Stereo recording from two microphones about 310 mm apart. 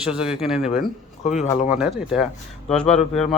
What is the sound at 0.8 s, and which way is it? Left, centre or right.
Speech, left.